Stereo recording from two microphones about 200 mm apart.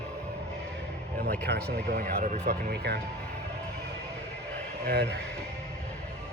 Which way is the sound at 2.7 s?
55° right (ahead or behind).